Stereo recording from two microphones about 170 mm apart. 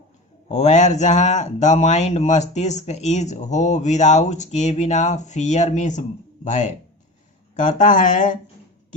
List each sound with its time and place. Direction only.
0.4 s speech: 40° left (ahead or behind)